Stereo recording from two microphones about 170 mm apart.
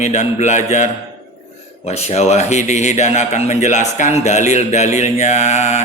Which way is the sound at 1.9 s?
40° left (ahead or behind).